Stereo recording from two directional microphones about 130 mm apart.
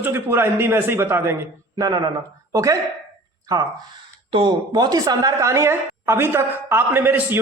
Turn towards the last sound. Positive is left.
turn(degrees=-15)  # may be behind; listen again after turning